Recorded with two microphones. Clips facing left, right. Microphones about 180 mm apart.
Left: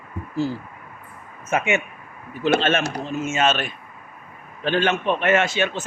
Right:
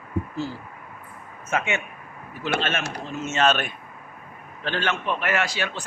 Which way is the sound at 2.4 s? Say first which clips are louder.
Left 7 dB; 25° left (ahead or behind).